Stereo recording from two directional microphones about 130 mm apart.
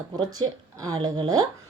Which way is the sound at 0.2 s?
30° right (ahead or behind).